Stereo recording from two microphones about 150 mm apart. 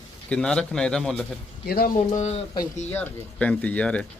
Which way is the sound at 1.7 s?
90° left.